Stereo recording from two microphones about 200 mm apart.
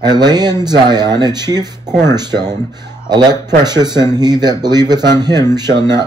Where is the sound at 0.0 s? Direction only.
20° right (ahead or behind).